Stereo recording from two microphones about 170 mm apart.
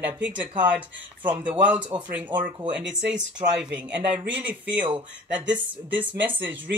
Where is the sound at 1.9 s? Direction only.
30° right (ahead or behind).